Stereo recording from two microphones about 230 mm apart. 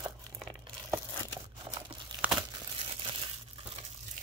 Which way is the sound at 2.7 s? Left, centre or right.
Right.